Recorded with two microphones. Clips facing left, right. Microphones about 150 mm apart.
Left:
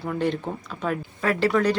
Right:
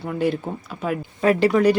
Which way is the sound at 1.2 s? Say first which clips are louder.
Right 7 dB; 20° right (ahead or behind).